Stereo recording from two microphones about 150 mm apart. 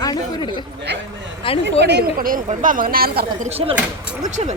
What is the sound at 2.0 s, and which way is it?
A woman's voice, 70° right (ahead or behind).